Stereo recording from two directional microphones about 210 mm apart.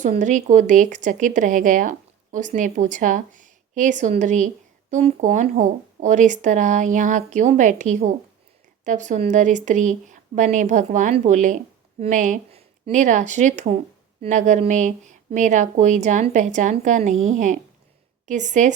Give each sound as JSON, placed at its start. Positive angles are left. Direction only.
{"t": 0.0, "sound": "speech", "side_deg": -35}